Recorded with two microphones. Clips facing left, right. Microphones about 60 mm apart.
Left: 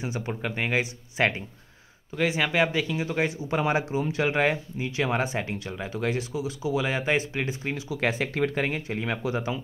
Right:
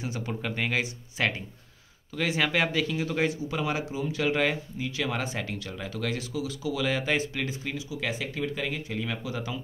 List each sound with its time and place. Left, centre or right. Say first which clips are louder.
0.0 s speech: left 2 dB; centre
2.1 s speech: left 2 dB; centre
3.4 s speech: left 4 dB; left
7.7 s speech: left 5 dB; left